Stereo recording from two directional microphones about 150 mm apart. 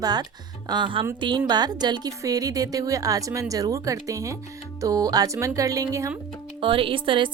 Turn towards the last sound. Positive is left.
turn(degrees=-35)  # may be behind; listen again after turning